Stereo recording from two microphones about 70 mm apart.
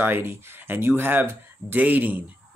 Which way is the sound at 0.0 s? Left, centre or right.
Right.